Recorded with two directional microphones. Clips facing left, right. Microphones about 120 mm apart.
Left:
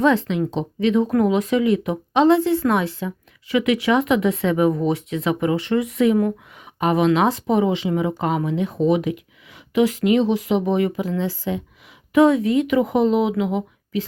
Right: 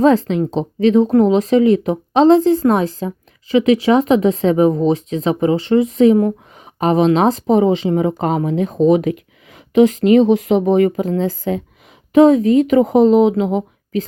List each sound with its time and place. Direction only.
0.0 s speech: 35° right (ahead or behind)